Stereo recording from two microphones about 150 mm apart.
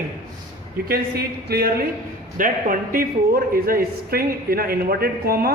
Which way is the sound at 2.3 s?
65° right (ahead or behind).